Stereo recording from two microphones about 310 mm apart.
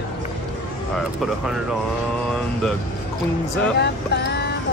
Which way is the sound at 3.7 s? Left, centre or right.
Left.